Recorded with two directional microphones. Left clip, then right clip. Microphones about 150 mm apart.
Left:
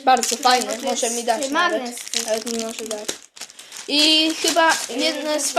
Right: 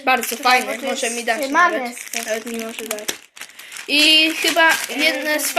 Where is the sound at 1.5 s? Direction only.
25° right (ahead or behind).